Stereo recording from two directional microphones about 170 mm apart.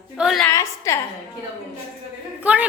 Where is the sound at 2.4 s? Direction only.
10° right (ahead or behind).